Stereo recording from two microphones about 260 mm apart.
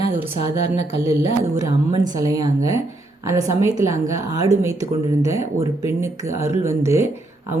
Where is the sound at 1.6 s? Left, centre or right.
Centre.